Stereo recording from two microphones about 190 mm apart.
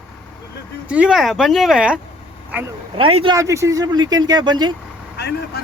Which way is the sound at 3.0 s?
30° right (ahead or behind).